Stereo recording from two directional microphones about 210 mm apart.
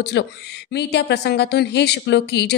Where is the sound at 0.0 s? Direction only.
55° left (ahead or behind).